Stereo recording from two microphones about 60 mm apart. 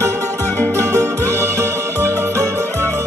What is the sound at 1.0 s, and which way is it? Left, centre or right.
Music, right.